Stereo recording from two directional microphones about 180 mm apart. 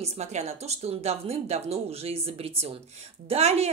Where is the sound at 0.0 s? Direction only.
35° right (ahead or behind).